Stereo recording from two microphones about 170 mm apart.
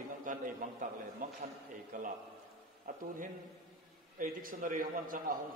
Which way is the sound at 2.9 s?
55° right (ahead or behind).